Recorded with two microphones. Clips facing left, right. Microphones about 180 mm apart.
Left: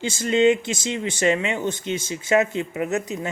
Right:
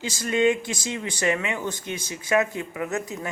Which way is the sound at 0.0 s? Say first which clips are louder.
Left 4 dB; 25° left (ahead or behind).